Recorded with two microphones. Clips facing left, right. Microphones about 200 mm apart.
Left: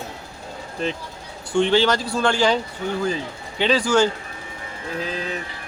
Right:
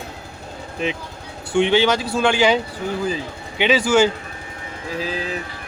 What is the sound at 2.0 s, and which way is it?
Speech, 5° right (ahead or behind).